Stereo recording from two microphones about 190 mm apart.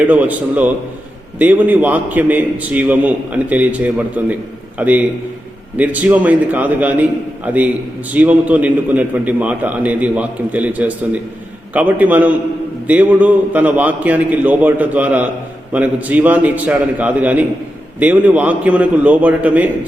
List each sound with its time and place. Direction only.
0.0 s a man's voice: 10° right (ahead or behind)